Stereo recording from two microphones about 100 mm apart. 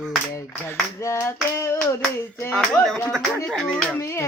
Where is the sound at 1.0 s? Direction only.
25° left (ahead or behind).